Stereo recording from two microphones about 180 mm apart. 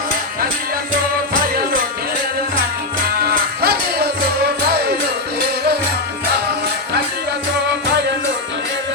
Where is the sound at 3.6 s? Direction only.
60° right (ahead or behind).